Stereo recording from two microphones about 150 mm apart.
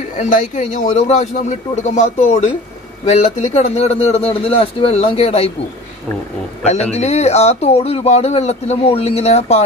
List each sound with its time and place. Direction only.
0.2 s speech: 60° left (ahead or behind); by 5.5 s 40° left (ahead or behind)
6.6 s speech: 45° left (ahead or behind)